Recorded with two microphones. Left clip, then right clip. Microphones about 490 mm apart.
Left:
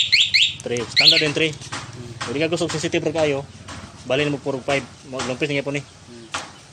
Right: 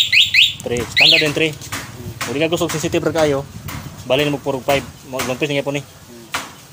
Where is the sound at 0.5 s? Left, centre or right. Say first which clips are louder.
Right 3 dB; left.